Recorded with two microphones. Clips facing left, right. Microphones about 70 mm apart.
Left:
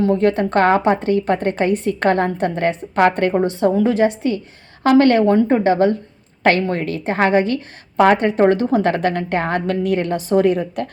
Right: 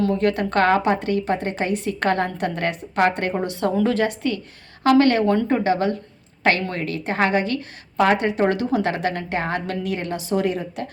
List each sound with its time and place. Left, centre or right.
0.0 s a woman's voice: left
3.3 s a woman's voice: left
4.8 s a woman's voice: left